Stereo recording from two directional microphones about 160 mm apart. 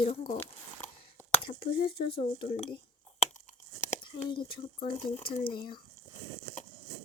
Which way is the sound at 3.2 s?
50° left (ahead or behind).